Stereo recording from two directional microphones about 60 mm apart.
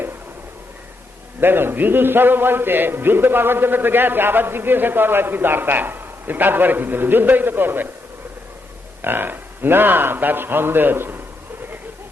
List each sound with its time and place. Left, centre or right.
1.4 s a man's voice: right
9.0 s a man's voice: right